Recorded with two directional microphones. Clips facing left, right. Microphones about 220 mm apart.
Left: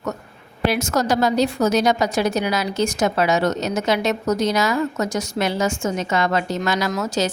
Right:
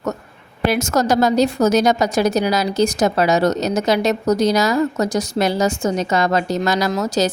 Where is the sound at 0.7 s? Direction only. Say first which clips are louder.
Right 4 dB; 45° right (ahead or behind).